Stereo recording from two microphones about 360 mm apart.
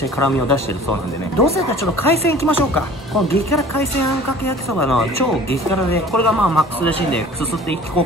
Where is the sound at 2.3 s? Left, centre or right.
Centre.